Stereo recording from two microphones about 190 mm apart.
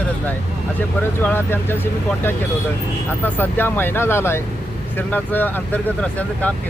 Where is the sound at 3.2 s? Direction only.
10° left (ahead or behind).